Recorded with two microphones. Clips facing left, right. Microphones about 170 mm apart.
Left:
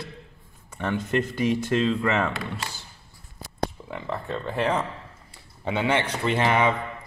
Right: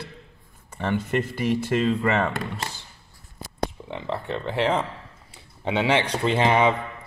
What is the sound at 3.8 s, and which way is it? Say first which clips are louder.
Speech: right 2 dB; 20° right (ahead or behind).